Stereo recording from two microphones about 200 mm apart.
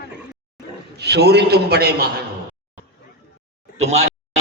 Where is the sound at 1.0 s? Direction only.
55° right (ahead or behind).